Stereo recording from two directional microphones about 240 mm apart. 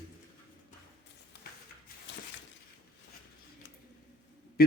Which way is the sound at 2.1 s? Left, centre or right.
Left.